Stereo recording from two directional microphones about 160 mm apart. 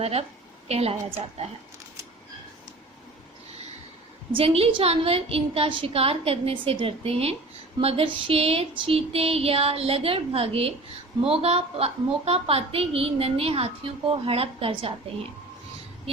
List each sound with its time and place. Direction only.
0.0 s a woman's voice: 40° right (ahead or behind)
4.3 s a woman's voice: 35° right (ahead or behind)